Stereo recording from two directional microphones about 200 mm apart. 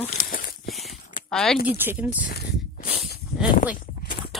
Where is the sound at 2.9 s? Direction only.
5° right (ahead or behind).